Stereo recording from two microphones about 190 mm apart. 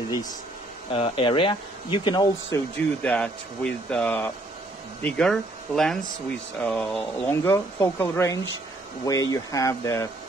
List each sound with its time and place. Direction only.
0.9 s speech: 30° left (ahead or behind)
3.0 s speech: 5° left (ahead or behind)